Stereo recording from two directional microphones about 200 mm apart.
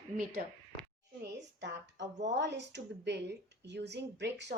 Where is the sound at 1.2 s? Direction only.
60° right (ahead or behind).